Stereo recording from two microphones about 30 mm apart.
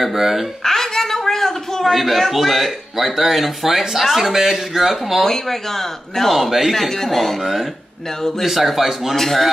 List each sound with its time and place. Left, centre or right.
0.0 s speech: centre
0.7 s a sound: centre
2.0 s speech: centre
5.2 s speech: centre
6.3 s speech: centre
8.5 s speech: centre
9.1 s speech: centre